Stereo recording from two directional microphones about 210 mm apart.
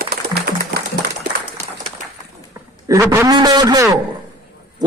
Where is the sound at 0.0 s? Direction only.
50° right (ahead or behind).